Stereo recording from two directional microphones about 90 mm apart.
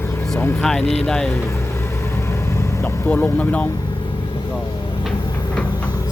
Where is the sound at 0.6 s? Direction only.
10° left (ahead or behind).